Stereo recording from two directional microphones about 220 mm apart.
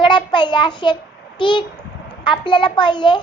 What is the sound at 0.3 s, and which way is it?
A child's voice, 20° left (ahead or behind).